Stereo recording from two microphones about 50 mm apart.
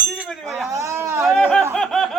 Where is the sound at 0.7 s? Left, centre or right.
Right.